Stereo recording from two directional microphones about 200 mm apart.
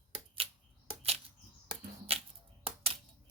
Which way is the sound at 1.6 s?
25° right (ahead or behind).